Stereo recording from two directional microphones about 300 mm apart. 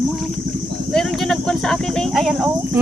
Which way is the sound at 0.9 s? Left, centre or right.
Centre.